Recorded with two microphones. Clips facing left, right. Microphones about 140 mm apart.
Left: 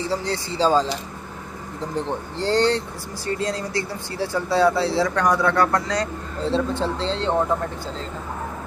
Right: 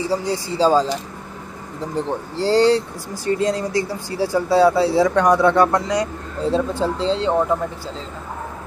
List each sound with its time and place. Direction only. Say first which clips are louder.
0.1 s speech: right 4 dB; 10° right (ahead or behind)
2.0 s speech: right 5 dB; 5° right (ahead or behind)
3.3 s speech: right 5 dB; 15° right (ahead or behind)
6.5 s speech: right 2 dB; 40° right (ahead or behind)
7.0 s speech: right 4 dB; 5° right (ahead or behind)